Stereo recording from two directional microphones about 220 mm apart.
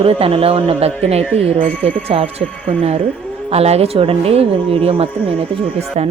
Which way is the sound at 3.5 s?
30° right (ahead or behind).